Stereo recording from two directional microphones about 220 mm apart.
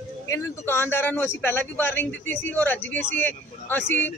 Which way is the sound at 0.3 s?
10° left (ahead or behind).